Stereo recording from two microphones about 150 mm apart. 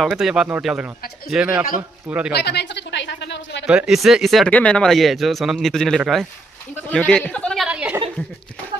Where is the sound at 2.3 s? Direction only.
90° left.